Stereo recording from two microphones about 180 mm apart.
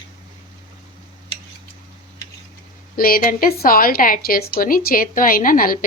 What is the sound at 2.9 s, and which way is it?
A woman's voice, 55° left (ahead or behind).